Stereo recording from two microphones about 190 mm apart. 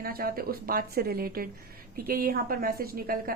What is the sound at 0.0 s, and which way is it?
A woman's voice, 50° right (ahead or behind).